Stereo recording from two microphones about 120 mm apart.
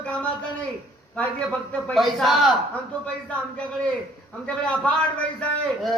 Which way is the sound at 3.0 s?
10° left (ahead or behind).